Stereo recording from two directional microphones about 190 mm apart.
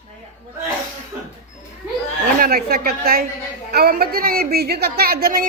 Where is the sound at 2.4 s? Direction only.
50° right (ahead or behind).